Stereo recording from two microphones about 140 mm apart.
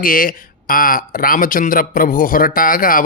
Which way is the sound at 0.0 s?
80° left.